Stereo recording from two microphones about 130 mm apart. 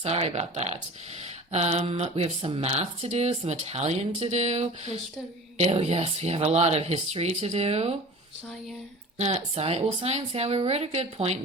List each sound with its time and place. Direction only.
0.0 s speech: 55° right (ahead or behind)
9.1 s speech: 55° right (ahead or behind)